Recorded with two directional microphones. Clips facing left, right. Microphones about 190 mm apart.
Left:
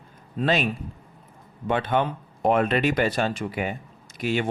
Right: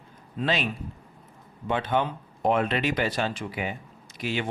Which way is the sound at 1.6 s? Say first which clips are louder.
Left 2 dB; 55° left (ahead or behind).